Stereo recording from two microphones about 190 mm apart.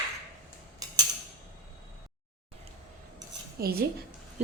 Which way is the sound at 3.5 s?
55° right (ahead or behind).